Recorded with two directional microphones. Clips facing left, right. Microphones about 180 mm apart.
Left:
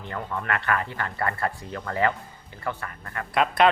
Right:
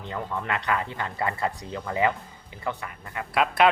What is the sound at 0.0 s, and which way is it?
A man's voice, 15° right (ahead or behind).